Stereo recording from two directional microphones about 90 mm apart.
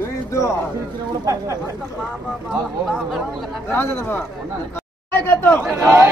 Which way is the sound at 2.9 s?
Centre (ahead or behind).